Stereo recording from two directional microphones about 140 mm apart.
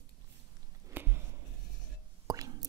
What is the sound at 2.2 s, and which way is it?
Whispering, 25° right (ahead or behind).